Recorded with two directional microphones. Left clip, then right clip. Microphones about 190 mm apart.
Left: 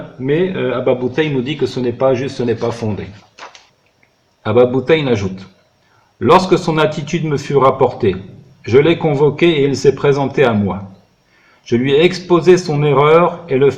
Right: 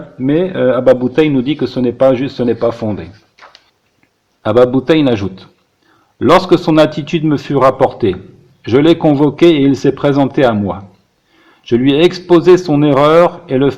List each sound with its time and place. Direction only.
0.3 s a man's voice: 45° right (ahead or behind)
4.4 s a man's voice: 40° right (ahead or behind)
8.7 s a man's voice: 40° right (ahead or behind)